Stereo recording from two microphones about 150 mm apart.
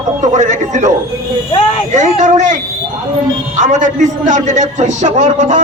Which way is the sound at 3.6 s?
55° right (ahead or behind).